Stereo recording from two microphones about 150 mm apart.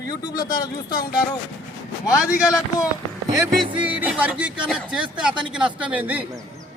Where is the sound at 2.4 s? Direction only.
25° left (ahead or behind).